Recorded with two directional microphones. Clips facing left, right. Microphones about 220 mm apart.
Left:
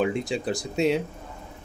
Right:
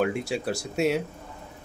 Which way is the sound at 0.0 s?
5° right (ahead or behind).